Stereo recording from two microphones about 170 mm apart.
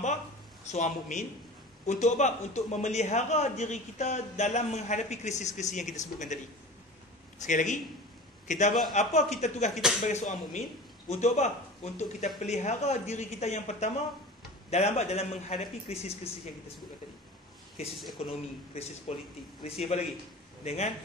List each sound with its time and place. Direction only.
0.7 s a man's voice: 45° left (ahead or behind)
7.4 s a man's voice: 45° left (ahead or behind)
17.8 s speech: centre (ahead or behind)
18.8 s a man's voice: 35° left (ahead or behind)